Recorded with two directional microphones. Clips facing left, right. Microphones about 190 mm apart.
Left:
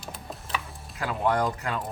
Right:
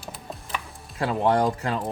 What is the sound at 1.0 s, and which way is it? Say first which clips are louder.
Speech: right 4 dB; 30° right (ahead or behind).